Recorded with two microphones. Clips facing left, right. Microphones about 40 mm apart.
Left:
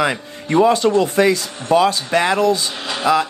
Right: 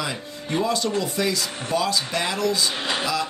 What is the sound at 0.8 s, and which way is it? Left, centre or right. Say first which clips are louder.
Speech: left 10 dB; left.